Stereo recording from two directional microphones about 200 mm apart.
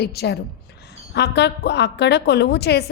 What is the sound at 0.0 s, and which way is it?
A woman's voice, 55° left (ahead or behind).